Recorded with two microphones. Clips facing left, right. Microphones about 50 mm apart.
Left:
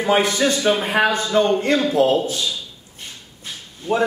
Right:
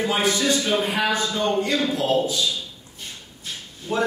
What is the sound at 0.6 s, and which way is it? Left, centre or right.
Speech, left.